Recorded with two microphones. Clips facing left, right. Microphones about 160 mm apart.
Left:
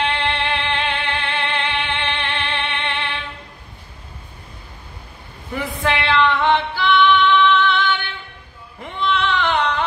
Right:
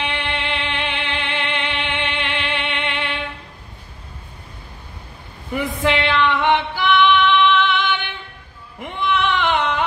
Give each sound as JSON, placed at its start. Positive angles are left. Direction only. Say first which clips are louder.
{"t": 0.0, "sound": "music", "louder": "left 4 dB", "side_deg": -15}
{"t": 5.9, "sound": "female singing", "louder": "left 1 dB", "side_deg": -15}
{"t": 8.8, "sound": "a sound", "louder": "right 1 dB", "side_deg": -15}